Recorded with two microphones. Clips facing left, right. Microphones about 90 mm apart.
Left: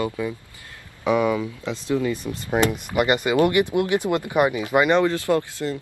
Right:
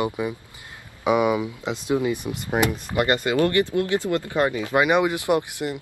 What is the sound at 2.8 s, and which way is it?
Speech, 10° left (ahead or behind).